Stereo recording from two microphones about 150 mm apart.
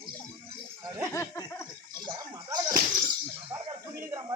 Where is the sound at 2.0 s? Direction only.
25° right (ahead or behind).